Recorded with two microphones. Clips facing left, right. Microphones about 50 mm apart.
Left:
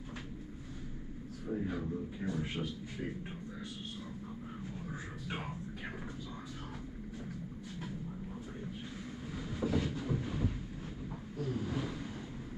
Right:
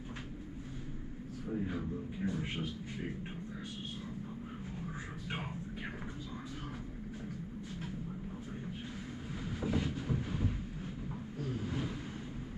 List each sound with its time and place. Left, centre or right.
1.5 s a man's voice: centre
1.8 s a man's voice: centre
4.9 s music: centre
9.3 s a sound: centre
11.3 s vehicle: centre